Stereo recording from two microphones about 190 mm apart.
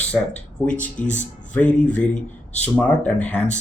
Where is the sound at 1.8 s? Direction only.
40° left (ahead or behind).